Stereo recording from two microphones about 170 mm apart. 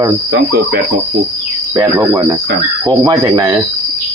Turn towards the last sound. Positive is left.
turn(degrees=-20)  # may be behind; listen again after turning